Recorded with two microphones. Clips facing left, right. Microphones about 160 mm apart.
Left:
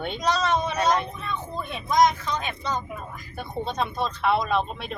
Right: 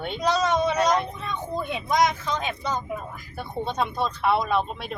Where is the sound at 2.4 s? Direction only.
15° right (ahead or behind).